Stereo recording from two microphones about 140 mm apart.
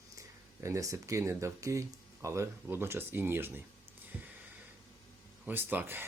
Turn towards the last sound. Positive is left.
turn(degrees=-15)  # may be behind; listen again after turning